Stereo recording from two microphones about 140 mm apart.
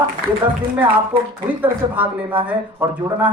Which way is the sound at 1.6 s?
10° right (ahead or behind).